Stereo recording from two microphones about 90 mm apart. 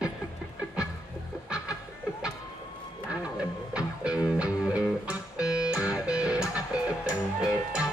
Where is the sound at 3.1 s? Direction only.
10° right (ahead or behind).